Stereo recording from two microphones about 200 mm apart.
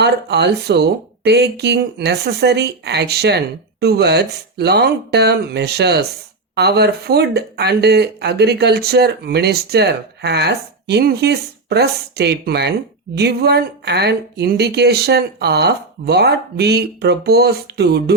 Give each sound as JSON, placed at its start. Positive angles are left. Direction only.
{"t": 0.0, "sound": "speech", "side_deg": -60}